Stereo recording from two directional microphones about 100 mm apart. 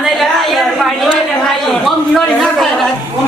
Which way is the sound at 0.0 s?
Centre (ahead or behind).